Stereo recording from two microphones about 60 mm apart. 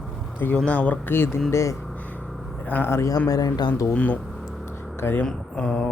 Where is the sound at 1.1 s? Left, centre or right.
Left.